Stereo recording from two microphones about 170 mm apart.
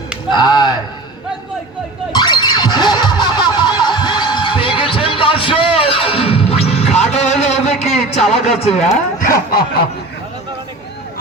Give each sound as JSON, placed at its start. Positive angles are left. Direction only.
{"t": 0.3, "sound": "speech", "side_deg": 25}
{"t": 2.1, "sound": "a sound", "side_deg": 25}
{"t": 8.2, "sound": "speech", "side_deg": 0}
{"t": 8.9, "sound": "speech", "side_deg": 50}